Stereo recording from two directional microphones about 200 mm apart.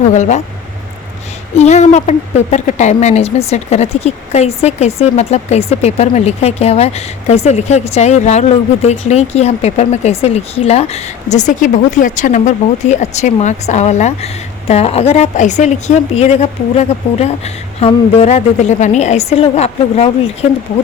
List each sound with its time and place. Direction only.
0.1 s a woman's voice: 35° left (ahead or behind)
1.5 s a woman's voice: 35° left (ahead or behind)